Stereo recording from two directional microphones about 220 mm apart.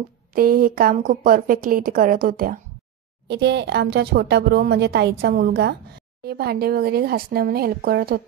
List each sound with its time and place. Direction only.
0.3 s a woman's voice: 40° right (ahead or behind)
3.3 s a woman's voice: 50° right (ahead or behind)